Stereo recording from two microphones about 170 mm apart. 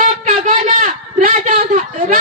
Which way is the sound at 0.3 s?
50° right (ahead or behind).